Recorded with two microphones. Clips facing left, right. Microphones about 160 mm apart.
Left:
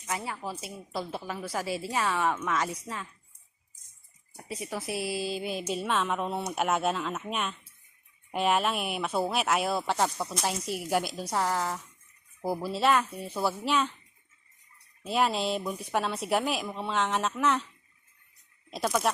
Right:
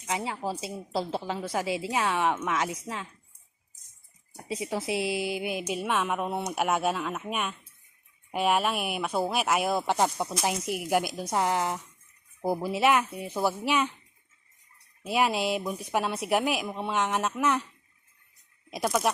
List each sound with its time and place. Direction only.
0.1 s a woman's voice: 25° right (ahead or behind)
4.4 s a woman's voice: 25° right (ahead or behind)
15.0 s a woman's voice: 10° right (ahead or behind)